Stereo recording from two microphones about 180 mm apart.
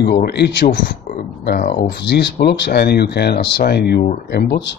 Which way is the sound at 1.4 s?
55° left (ahead or behind).